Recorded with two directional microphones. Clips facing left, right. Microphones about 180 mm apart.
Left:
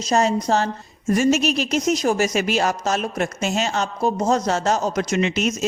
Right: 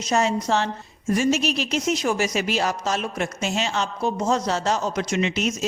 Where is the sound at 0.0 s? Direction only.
35° left (ahead or behind).